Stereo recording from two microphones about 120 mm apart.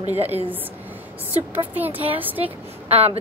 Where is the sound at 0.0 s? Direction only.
60° right (ahead or behind).